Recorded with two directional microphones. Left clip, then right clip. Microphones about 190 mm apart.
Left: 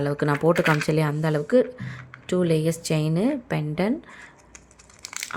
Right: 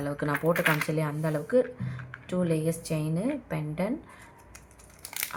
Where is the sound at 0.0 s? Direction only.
40° left (ahead or behind).